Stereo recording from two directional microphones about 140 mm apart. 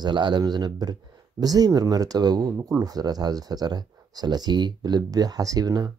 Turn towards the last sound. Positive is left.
turn(degrees=-25)  # may be behind; listen again after turning